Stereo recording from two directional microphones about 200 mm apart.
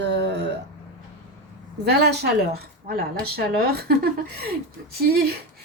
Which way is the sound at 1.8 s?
55° right (ahead or behind).